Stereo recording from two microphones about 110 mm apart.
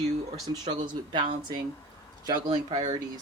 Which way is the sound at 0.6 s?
45° right (ahead or behind).